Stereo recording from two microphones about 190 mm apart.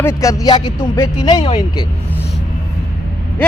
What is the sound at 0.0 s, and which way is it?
Speech, 15° left (ahead or behind).